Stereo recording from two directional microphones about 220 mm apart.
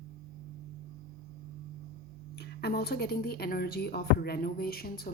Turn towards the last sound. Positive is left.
turn(degrees=45)  # may be behind; listen again after turning